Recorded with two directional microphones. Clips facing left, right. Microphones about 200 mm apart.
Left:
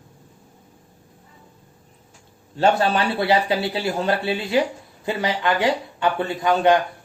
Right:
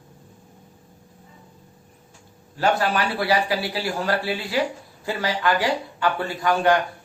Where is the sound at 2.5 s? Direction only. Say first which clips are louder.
Left 3 dB; 25° left (ahead or behind).